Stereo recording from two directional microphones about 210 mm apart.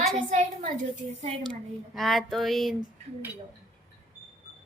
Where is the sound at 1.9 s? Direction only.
Centre (ahead or behind).